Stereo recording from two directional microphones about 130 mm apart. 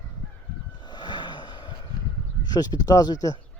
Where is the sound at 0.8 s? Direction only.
35° left (ahead or behind).